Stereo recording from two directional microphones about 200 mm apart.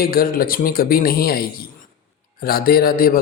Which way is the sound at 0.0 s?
45° left (ahead or behind).